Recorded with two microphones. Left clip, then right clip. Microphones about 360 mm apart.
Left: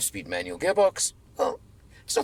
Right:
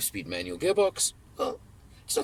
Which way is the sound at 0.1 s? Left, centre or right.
Centre.